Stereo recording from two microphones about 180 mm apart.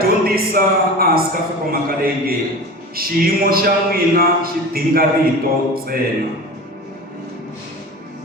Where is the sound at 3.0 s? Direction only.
55° right (ahead or behind).